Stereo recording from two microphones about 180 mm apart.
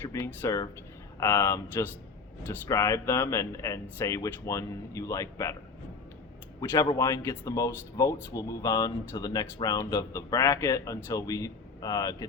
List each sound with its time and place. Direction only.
0.0 s speech: 15° left (ahead or behind)
6.6 s speech: 20° left (ahead or behind)